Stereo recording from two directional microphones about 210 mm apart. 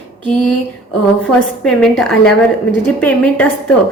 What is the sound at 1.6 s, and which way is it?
A woman's voice, 5° left (ahead or behind).